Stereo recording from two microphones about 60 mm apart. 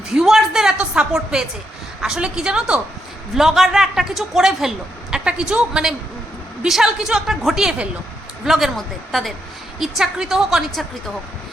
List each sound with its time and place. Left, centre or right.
0.1 s a woman's voice: centre
3.3 s a woman's voice: centre